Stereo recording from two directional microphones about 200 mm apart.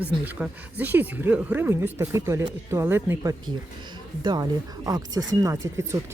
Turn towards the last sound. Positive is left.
turn(degrees=-15)  # may be behind; listen again after turning